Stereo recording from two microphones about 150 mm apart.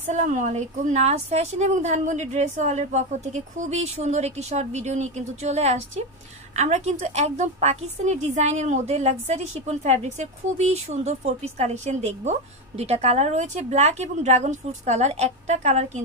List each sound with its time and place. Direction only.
0.1 s a woman's voice: 55° right (ahead or behind)